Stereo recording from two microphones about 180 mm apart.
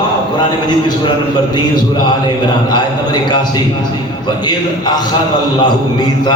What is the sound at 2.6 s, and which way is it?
A man's voice, 25° left (ahead or behind).